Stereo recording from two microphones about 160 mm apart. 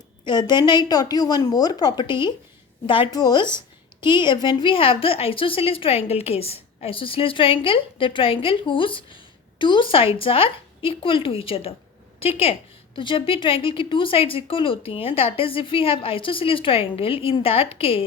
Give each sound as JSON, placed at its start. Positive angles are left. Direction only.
{"t": 0.3, "sound": "a woman's voice", "side_deg": 30}